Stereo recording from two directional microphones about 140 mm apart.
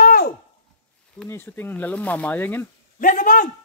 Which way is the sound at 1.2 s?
15° left (ahead or behind).